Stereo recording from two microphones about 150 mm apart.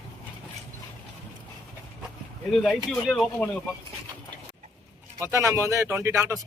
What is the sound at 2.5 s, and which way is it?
Speech, centre (ahead or behind).